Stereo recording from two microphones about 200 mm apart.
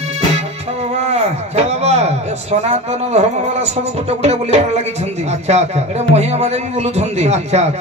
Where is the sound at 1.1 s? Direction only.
30° right (ahead or behind).